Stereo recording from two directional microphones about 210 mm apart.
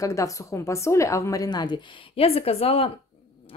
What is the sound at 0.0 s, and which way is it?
A woman's voice, 15° left (ahead or behind).